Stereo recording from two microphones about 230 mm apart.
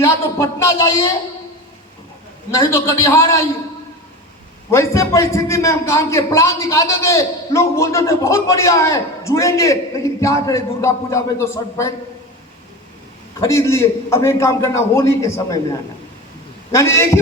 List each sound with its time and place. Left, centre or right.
0.0 s speech: centre
2.5 s a man's voice: centre
4.7 s a man's voice: centre
13.4 s a man's voice: centre
16.7 s a man's voice: centre